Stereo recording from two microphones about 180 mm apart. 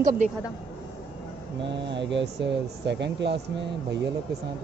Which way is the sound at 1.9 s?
80° right.